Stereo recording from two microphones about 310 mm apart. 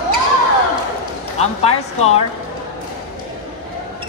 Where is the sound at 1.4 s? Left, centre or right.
Centre.